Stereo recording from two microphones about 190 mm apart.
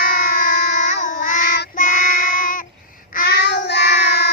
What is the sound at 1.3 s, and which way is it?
Child singing, 60° left (ahead or behind).